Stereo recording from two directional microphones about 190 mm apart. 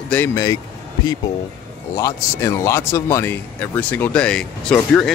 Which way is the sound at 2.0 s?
15° left (ahead or behind).